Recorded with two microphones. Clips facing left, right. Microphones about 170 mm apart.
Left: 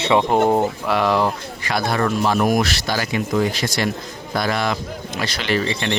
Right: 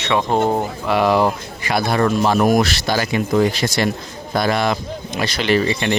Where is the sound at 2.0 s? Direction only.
30° right (ahead or behind).